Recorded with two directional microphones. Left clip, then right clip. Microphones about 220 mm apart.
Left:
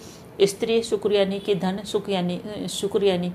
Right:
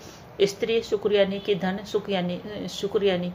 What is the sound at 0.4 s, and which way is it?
A woman's voice, 15° left (ahead or behind).